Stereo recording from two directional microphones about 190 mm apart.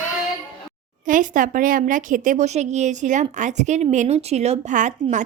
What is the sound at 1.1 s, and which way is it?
A woman's voice, 45° right (ahead or behind).